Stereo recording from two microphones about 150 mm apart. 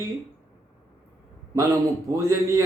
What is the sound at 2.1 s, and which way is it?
Speech, 20° right (ahead or behind).